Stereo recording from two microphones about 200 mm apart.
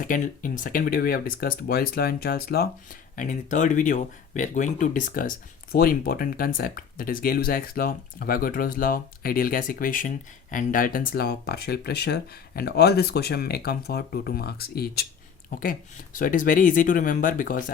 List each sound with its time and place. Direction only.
0.0 s speech: 40° left (ahead or behind)
16.1 s speech: 40° left (ahead or behind)